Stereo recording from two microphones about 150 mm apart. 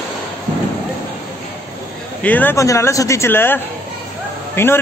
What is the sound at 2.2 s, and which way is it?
A man's voice, 10° left (ahead or behind).